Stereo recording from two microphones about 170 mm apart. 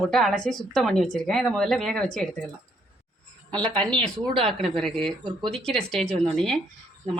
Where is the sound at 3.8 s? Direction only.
5° left (ahead or behind).